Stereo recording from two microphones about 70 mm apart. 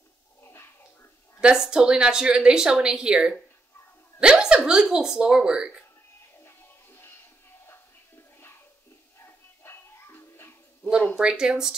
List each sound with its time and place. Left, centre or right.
0.4 s a sound: left
1.4 s a woman's voice: centre
6.4 s music: left
9.2 s music: left
10.8 s a sound: centre
11.1 s a woman's voice: centre